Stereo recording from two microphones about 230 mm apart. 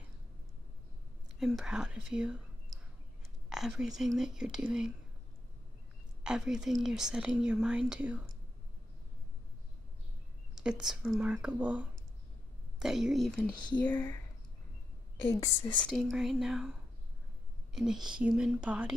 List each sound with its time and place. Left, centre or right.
1.4 s speech: centre
3.4 s speech: centre
6.2 s speech: centre
10.5 s speech: centre
15.4 s speech: centre
15.8 s speech: centre
17.7 s speech: centre